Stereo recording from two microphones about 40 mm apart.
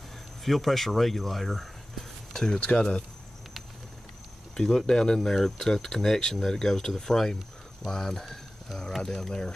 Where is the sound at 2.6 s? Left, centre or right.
Left.